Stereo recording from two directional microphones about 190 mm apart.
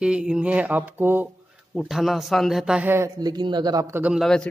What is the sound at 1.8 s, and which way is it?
Speech, centre (ahead or behind).